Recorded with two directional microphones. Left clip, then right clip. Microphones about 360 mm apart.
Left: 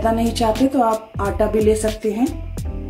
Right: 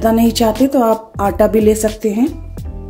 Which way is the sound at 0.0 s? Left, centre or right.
Right.